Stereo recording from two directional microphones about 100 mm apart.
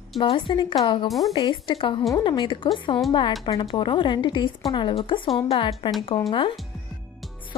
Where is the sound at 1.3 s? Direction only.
50° left (ahead or behind).